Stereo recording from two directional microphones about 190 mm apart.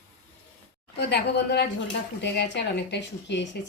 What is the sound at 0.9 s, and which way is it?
Speech, 60° left (ahead or behind).